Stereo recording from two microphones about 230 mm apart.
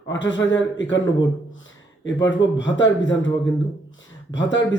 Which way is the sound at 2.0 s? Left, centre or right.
Left.